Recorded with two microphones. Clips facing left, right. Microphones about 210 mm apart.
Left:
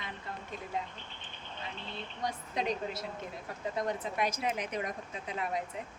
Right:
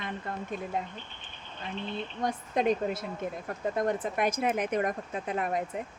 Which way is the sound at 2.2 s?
50° right (ahead or behind).